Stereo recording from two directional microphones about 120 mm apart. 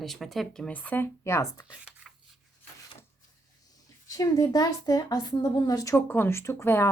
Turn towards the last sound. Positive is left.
turn(degrees=20)  # may be behind; listen again after turning